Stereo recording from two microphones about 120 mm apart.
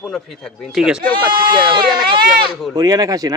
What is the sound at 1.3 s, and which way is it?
Speech, 40° right (ahead or behind).